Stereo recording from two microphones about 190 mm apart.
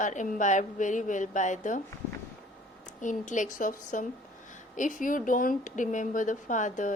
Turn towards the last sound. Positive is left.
turn(degrees=40)  # may be behind; listen again after turning